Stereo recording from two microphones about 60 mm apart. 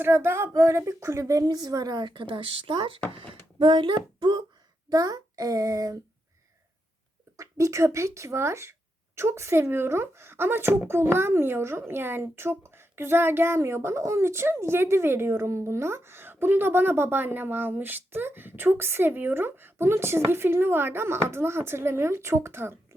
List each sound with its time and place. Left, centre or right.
0.0 s speech: right
0.5 s a woman's voice: right
4.9 s a child's voice: right
7.3 s a woman's voice: right